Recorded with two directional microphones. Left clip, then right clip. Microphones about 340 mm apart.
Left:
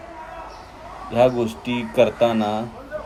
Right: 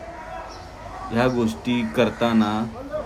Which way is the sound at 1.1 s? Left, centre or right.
Centre.